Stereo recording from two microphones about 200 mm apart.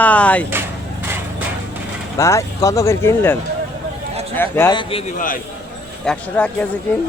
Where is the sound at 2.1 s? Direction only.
15° left (ahead or behind).